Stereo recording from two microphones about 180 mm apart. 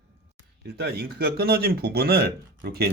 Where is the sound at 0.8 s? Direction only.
60° right (ahead or behind).